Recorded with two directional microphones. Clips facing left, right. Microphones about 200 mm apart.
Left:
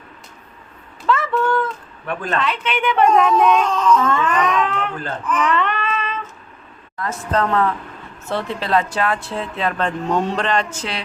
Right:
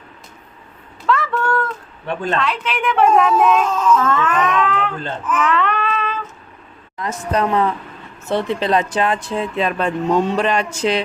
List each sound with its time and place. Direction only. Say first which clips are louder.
1.0 s a sound: left 1 dB; centre (ahead or behind)
2.3 s speech: left 1 dB; centre (ahead or behind)
5.2 s baby cry: right 1 dB; 5° right (ahead or behind)
6.9 s speech: right 1 dB; 15° right (ahead or behind)